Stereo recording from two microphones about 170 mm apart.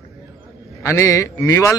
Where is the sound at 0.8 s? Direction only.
15° left (ahead or behind).